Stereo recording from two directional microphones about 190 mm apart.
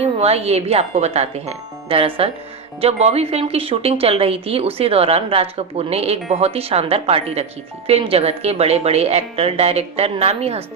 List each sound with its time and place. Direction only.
0.0 s a woman's voice: 35° right (ahead or behind)